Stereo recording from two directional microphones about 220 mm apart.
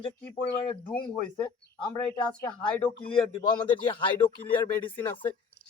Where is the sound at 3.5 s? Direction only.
20° left (ahead or behind).